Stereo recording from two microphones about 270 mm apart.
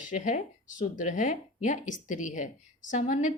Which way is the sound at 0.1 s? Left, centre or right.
Left.